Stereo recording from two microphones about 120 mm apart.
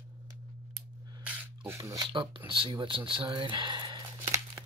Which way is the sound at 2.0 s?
45° right (ahead or behind).